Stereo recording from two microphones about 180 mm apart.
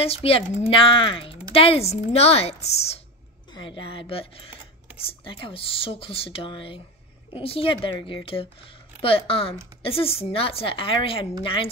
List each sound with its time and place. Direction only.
0.0 s speech: 35° left (ahead or behind)